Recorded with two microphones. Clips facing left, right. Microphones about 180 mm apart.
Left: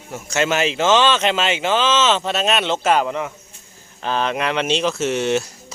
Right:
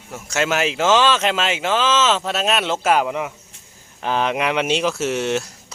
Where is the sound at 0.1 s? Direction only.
Centre (ahead or behind).